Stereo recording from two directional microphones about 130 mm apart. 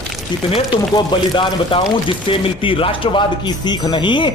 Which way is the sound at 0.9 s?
40° left (ahead or behind).